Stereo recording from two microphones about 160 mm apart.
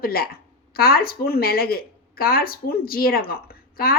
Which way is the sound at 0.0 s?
70° left (ahead or behind).